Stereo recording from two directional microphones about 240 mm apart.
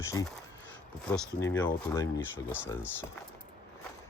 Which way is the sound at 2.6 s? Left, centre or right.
Centre.